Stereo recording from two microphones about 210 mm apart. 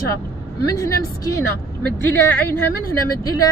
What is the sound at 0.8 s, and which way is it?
Speech, 15° left (ahead or behind).